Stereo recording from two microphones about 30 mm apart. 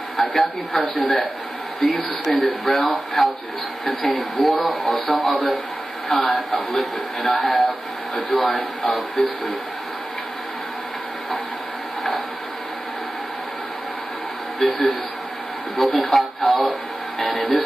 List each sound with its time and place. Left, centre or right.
0.2 s speech: centre
1.8 s speech: centre
2.2 s speech: centre
8.8 s speech: centre
14.6 s speech: centre